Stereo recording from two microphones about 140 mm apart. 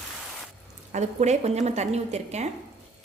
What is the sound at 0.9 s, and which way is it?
A woman's voice, 55° right (ahead or behind).